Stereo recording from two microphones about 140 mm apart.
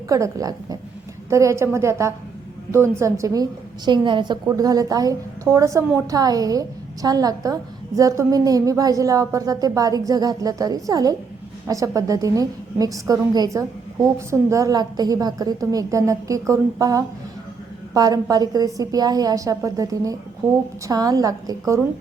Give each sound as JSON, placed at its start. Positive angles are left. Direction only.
{"t": 0.1, "sound": "a woman's voice", "side_deg": -25}